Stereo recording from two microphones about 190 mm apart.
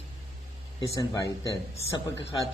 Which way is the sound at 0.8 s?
20° left (ahead or behind).